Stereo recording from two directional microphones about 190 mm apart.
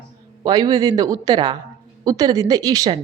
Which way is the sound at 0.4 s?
20° right (ahead or behind).